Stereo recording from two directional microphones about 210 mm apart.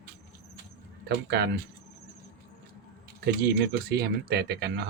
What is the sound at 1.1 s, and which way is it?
Speech, 50° right (ahead or behind).